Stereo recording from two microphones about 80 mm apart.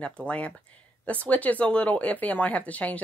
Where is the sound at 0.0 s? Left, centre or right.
Centre.